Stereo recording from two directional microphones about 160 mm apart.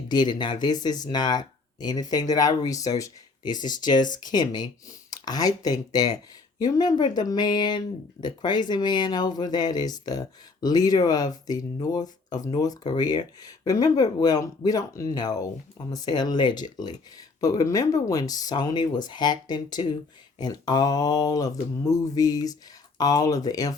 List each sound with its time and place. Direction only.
0.1 s speech: 25° left (ahead or behind)